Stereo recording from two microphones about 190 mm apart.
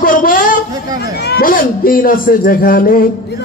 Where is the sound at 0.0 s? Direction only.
45° left (ahead or behind).